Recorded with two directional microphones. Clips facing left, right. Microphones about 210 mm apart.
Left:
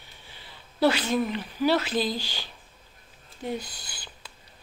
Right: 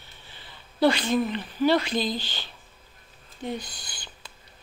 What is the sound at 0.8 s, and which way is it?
Speech, 5° left (ahead or behind).